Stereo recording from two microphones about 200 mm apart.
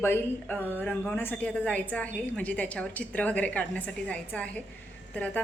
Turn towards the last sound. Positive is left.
turn(degrees=5)  # may be behind; listen again after turning